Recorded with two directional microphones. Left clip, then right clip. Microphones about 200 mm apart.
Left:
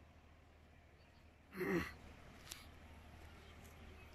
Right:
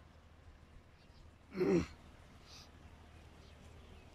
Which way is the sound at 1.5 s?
20° right (ahead or behind).